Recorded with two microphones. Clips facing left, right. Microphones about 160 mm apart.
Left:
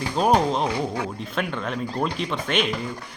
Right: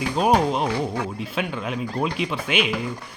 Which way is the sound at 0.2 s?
5° right (ahead or behind).